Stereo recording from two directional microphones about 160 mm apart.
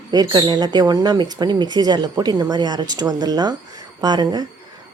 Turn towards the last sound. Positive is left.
turn(degrees=-25)  # may be behind; listen again after turning